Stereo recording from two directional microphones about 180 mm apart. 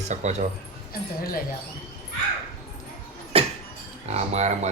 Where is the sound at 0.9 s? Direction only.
55° left (ahead or behind).